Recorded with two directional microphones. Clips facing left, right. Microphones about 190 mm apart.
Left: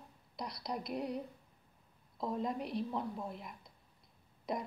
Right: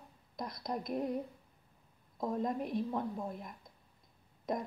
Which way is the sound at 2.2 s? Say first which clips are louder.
Right 2 dB; 45° right (ahead or behind).